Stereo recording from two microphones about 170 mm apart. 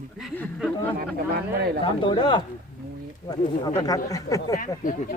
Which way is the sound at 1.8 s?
30° left (ahead or behind).